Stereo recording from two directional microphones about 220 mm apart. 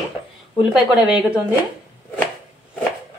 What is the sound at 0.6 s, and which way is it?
Speech, 5° right (ahead or behind).